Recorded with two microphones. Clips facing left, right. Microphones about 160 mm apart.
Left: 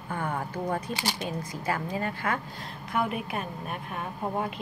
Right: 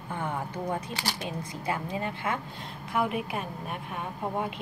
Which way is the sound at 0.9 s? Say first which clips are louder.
Left 2 dB; 20° left (ahead or behind).